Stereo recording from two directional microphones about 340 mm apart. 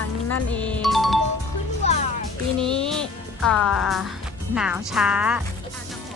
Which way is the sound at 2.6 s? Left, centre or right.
Centre.